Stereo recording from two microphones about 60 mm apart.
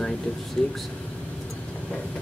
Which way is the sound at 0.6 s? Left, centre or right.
Centre.